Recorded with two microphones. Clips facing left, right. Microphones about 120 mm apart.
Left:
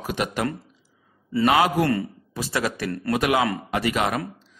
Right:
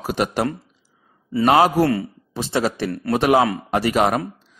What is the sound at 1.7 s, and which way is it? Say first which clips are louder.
Speech: right 4 dB; 10° right (ahead or behind).